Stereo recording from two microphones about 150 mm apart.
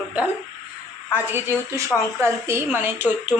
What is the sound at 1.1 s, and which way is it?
Speech, 15° right (ahead or behind).